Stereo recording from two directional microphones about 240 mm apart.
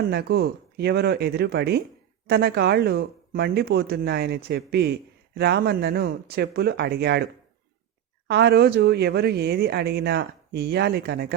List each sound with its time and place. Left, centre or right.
0.1 s speech: right
8.3 s speech: right